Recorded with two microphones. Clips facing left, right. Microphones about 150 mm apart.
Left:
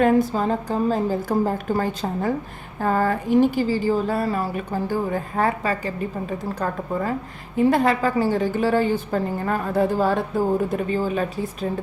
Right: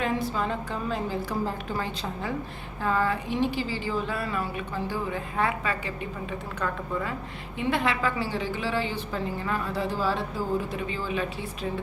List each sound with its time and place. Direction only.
0.0 s a woman's voice: 45° left (ahead or behind)